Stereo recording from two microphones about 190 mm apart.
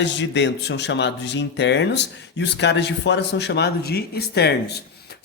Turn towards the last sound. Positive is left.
turn(degrees=60)  # may be behind; listen again after turning